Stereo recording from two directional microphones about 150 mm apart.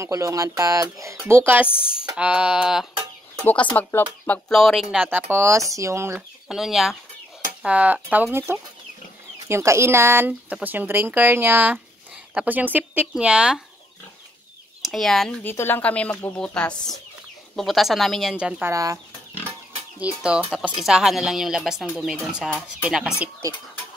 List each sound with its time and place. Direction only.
0.0 s speech: 20° right (ahead or behind); by 2.9 s 5° right (ahead or behind)
3.4 s speech: 10° left (ahead or behind); by 5.2 s 5° right (ahead or behind)
5.3 s speech: 20° right (ahead or behind)
6.1 s speech: 5° right (ahead or behind)
14.8 s speech: 5° left (ahead or behind)
18.7 s speech: 20° right (ahead or behind)
20.2 s speech: 5° right (ahead or behind)